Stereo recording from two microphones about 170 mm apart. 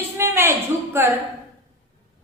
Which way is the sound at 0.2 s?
15° right (ahead or behind).